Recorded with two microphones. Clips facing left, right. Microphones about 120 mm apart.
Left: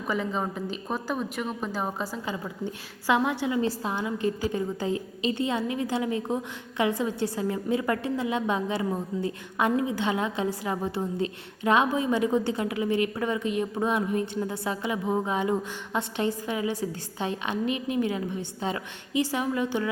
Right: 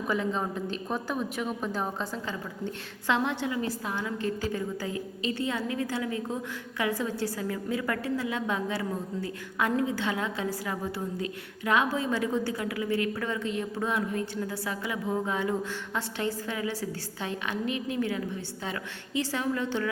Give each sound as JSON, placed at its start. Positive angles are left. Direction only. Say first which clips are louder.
{"t": 0.1, "sound": "a woman's voice", "louder": "left 1 dB", "side_deg": 0}
{"t": 3.5, "sound": "a woman's voice", "louder": "left 4 dB", "side_deg": 25}